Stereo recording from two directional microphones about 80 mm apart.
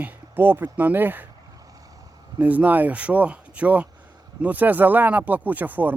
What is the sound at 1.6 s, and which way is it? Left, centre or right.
Vehicle, right.